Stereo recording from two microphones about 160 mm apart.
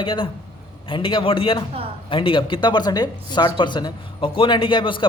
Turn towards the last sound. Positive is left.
turn(degrees=30)  # may be behind; listen again after turning